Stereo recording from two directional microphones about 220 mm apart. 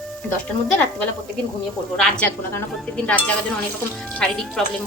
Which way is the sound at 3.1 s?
5° left (ahead or behind).